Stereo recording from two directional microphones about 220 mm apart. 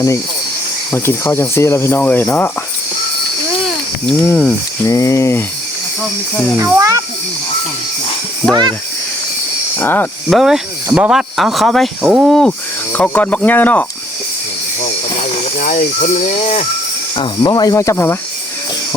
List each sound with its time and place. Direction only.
0.9 s speech: 10° left (ahead or behind)
4.0 s speech: 5° left (ahead or behind)
6.6 s a child's voice: 15° right (ahead or behind)
9.7 s speech: 10° left (ahead or behind)
14.8 s a sound: 35° left (ahead or behind)
17.2 s speech: 20° left (ahead or behind)